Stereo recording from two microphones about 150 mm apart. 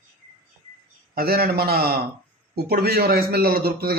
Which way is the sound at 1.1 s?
90° right.